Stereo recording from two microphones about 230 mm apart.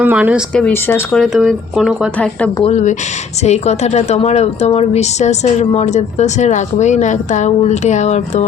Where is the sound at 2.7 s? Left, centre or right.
Left.